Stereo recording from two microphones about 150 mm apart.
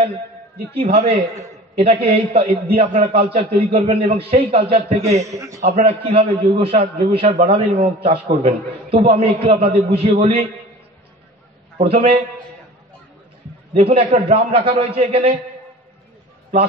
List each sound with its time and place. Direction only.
0.7 s a man's voice: 45° right (ahead or behind)
5.2 s a man's voice: 20° right (ahead or behind)
5.9 s a man's voice: 40° right (ahead or behind)
11.8 s a man's voice: 40° right (ahead or behind)
13.7 s a man's voice: 45° right (ahead or behind)